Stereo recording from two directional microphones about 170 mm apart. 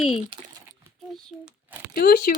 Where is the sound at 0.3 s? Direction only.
30° right (ahead or behind).